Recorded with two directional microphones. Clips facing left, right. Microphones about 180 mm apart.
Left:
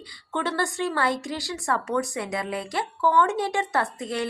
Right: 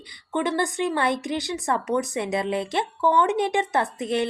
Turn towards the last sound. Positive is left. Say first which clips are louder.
# right 3 dB
turn(degrees=-20)  # may be behind; listen again after turning